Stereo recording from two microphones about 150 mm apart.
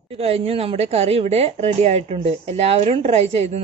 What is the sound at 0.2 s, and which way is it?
A woman's voice, 40° right (ahead or behind).